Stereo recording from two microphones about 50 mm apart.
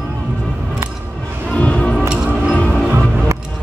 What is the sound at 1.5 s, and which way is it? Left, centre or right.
Music, left.